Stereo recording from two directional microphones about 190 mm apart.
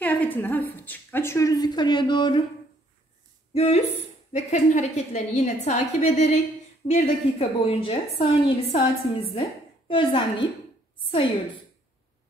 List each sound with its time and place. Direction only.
0.0 s a woman's voice: 10° left (ahead or behind); by 2.4 s 25° left (ahead or behind)
3.5 s a woman's voice: 35° left (ahead or behind)